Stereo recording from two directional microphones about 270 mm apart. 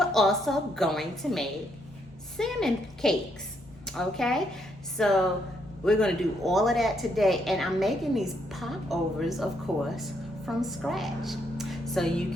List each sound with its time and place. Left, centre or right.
0.0 s a woman's voice: centre